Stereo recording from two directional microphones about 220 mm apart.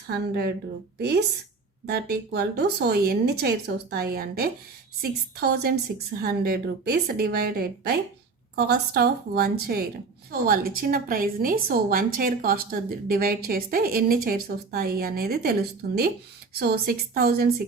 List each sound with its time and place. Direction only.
0.1 s a woman's voice: 45° right (ahead or behind)
16.6 s speech: 45° right (ahead or behind)